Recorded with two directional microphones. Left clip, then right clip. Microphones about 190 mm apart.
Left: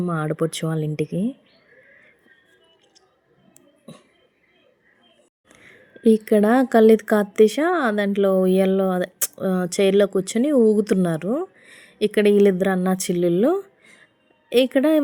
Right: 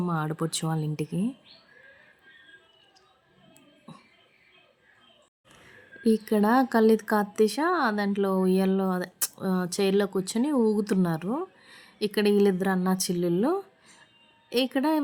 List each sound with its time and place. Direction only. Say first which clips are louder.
0.0 s speech: left 6 dB; 5° left (ahead or behind)
6.0 s speech: left 8 dB; 15° left (ahead or behind)